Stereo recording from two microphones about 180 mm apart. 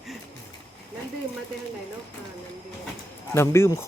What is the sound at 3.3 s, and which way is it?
Speech, 15° left (ahead or behind).